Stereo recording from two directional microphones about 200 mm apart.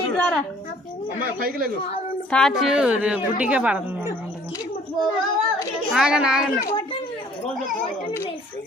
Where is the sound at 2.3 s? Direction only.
Centre (ahead or behind).